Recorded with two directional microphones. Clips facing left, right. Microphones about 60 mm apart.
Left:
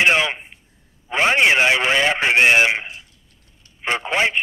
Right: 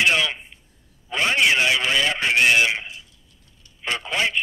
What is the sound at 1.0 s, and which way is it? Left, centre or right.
Radio, left.